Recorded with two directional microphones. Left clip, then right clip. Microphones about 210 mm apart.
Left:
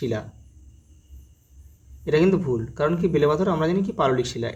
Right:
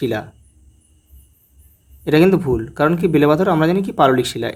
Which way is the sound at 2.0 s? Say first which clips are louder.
Right 6 dB; 40° right (ahead or behind).